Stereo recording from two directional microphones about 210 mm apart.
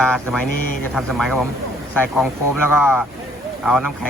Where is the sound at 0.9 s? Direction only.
Centre (ahead or behind).